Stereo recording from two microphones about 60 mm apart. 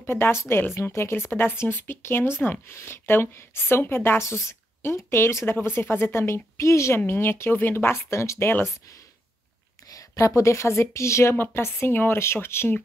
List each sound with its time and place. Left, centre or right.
0.0 s a woman's voice: left
9.8 s a woman's voice: left